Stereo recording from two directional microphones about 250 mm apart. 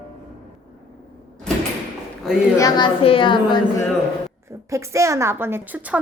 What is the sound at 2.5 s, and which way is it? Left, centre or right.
A woman's voice, centre.